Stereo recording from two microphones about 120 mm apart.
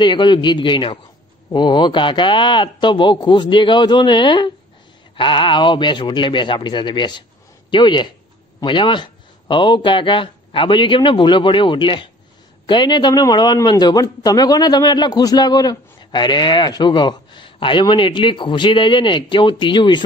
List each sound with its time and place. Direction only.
0.0 s a man's voice: 40° left (ahead or behind)